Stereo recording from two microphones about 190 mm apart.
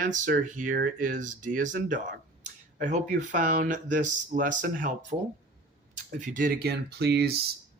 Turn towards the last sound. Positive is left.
turn(degrees=-60)  # may be behind; listen again after turning